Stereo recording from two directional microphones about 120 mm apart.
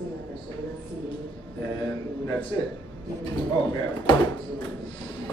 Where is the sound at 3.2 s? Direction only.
40° left (ahead or behind).